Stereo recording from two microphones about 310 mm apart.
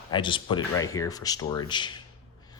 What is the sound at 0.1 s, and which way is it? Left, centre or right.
Speech, centre.